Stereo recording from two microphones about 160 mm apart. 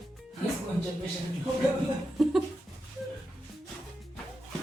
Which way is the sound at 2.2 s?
Centre (ahead or behind).